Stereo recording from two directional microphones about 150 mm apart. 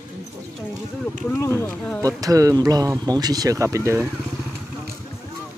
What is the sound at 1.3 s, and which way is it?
Speech, 15° left (ahead or behind).